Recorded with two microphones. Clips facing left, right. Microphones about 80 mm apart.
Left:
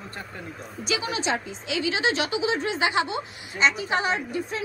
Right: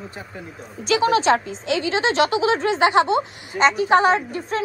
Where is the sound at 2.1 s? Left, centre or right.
Right.